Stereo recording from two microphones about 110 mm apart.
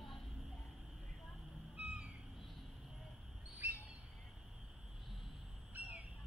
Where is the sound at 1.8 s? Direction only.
10° right (ahead or behind).